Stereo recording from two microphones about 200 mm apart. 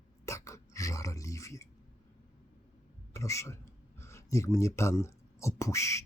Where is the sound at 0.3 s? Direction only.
15° left (ahead or behind).